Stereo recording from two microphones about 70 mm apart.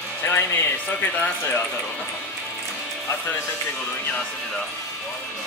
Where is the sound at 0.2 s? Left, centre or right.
Left.